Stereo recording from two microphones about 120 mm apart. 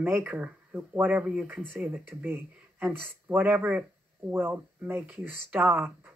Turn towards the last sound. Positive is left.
turn(degrees=-15)  # may be behind; listen again after turning